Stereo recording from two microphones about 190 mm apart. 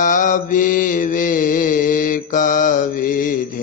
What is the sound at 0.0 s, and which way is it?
Mantra, 45° left (ahead or behind).